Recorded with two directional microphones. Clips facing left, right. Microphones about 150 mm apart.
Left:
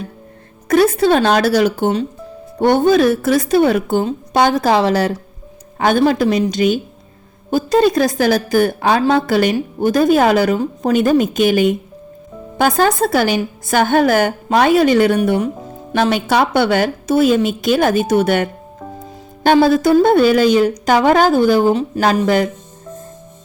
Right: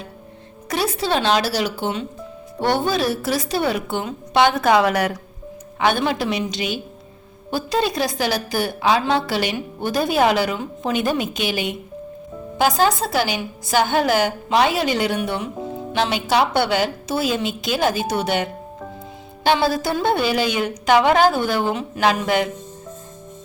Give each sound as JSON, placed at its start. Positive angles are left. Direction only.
{"t": 0.7, "sound": "a woman's voice", "side_deg": 50}
{"t": 5.8, "sound": "a woman's voice", "side_deg": 40}